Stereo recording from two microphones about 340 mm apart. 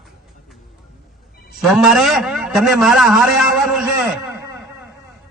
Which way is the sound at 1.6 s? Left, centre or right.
Centre.